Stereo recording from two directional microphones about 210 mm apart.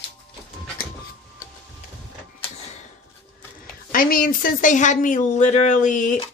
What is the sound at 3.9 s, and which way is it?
Speech, 40° left (ahead or behind).